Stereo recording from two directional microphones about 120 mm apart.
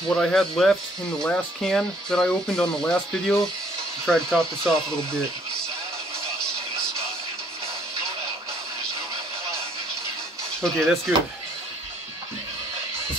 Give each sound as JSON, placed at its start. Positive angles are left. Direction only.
{"t": 0.1, "sound": "speech", "side_deg": 5}
{"t": 10.6, "sound": "speech", "side_deg": 0}